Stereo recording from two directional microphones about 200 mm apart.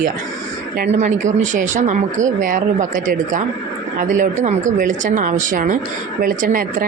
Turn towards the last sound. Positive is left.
turn(degrees=-45)  # may be behind; listen again after turning